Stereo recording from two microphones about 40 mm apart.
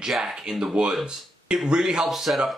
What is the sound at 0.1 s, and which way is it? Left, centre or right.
Speech, centre.